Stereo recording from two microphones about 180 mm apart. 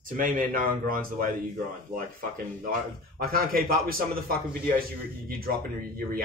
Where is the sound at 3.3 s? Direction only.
55° right (ahead or behind).